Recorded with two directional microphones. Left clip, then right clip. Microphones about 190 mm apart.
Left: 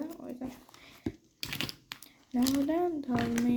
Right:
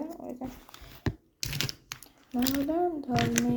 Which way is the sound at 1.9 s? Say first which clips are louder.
Right 2 dB; 10° left (ahead or behind).